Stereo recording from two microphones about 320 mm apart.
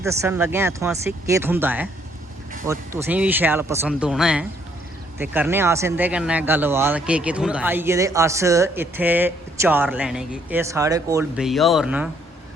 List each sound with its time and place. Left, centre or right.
0.0 s speech: centre